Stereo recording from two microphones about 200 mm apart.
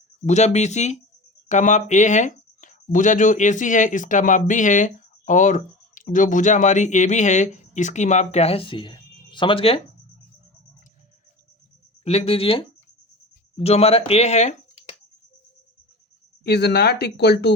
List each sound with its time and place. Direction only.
0.3 s speech: 35° left (ahead or behind)
12.0 s speech: 30° left (ahead or behind)
16.4 s speech: 55° left (ahead or behind)